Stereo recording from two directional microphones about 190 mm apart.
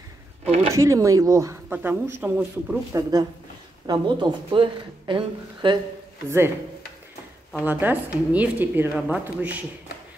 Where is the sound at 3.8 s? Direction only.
25° right (ahead or behind).